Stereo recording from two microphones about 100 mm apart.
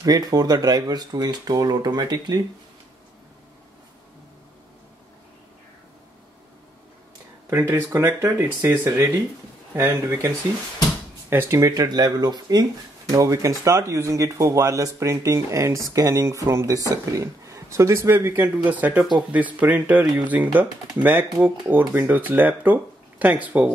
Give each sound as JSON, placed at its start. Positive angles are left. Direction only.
{"t": 0.0, "sound": "speech", "side_deg": -40}
{"t": 7.7, "sound": "speech", "side_deg": -20}
{"t": 11.7, "sound": "speech", "side_deg": -40}